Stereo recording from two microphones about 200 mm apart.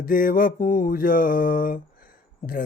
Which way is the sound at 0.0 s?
45° left (ahead or behind).